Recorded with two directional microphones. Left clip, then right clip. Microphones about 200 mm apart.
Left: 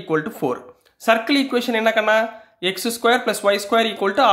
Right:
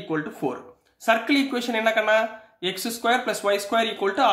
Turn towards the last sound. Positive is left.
turn(degrees=30)  # may be behind; listen again after turning